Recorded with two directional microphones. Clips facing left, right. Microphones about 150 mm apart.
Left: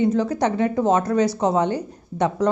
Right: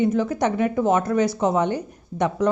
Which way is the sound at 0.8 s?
15° left (ahead or behind).